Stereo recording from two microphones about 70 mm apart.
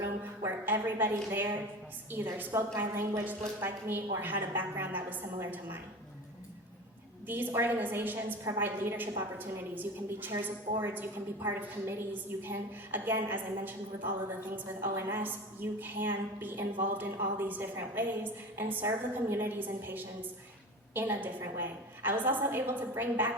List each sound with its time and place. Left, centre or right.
0.0 s a woman's voice: right
7.3 s a woman's voice: right